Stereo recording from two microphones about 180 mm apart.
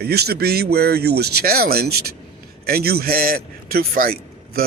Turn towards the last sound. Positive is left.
turn(degrees=-55)  # may be behind; listen again after turning